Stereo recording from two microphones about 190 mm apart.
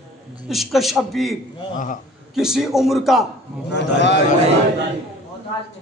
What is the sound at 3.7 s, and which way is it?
Speech, 65° left (ahead or behind).